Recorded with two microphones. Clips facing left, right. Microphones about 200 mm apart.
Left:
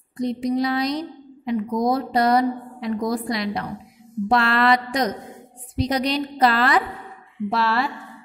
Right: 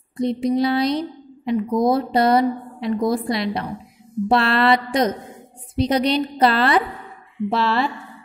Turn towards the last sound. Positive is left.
turn(degrees=-25)  # may be behind; listen again after turning